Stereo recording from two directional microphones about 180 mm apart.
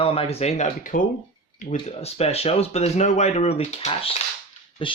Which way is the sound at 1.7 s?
35° left (ahead or behind).